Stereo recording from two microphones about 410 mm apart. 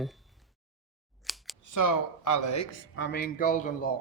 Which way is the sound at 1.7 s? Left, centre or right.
Left.